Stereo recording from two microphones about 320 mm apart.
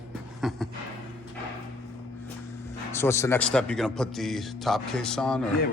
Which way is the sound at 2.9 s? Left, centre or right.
Centre.